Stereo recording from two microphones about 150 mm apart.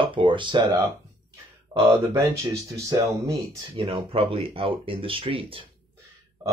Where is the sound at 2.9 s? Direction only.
20° right (ahead or behind).